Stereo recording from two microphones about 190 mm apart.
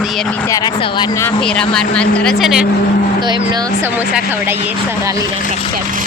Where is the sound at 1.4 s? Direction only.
5° left (ahead or behind).